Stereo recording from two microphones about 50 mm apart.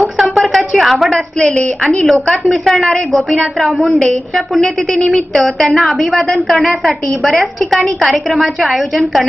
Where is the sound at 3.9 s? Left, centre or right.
Centre.